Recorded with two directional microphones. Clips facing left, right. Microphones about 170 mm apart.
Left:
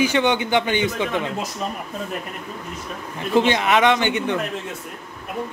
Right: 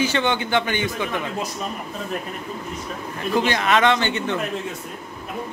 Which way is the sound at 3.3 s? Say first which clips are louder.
Left 2 dB; 20° left (ahead or behind).